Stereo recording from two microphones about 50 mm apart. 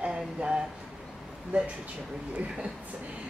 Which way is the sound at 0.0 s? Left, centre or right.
Right.